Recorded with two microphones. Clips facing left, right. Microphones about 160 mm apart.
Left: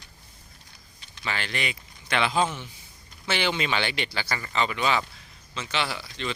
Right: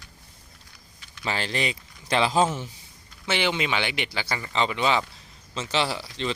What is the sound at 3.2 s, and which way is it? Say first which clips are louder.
Speech: right 1 dB; 20° right (ahead or behind).